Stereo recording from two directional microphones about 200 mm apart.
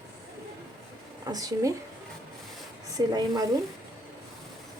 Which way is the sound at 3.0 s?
20° right (ahead or behind).